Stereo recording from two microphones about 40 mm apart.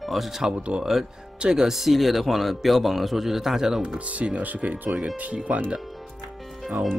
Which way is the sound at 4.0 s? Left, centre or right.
Right.